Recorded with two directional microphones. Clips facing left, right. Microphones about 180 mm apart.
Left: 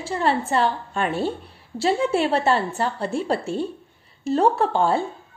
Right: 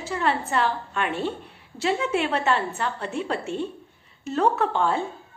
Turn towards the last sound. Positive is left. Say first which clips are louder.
# left 3 dB
turn(degrees=35)  # may be behind; listen again after turning